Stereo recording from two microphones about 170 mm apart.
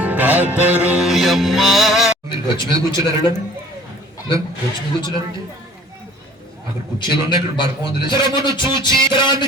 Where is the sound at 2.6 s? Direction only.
20° right (ahead or behind).